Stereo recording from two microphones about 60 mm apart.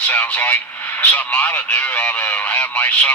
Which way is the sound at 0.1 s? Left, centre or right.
Left.